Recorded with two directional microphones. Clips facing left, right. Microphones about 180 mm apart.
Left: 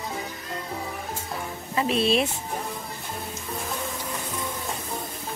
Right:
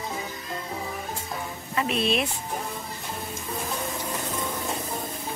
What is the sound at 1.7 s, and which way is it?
Speech, 30° left (ahead or behind).